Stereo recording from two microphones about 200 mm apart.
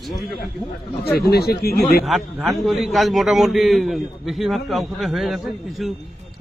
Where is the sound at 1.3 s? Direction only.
50° left (ahead or behind).